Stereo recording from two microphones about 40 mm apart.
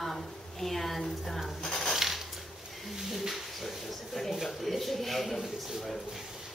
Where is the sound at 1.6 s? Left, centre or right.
Centre.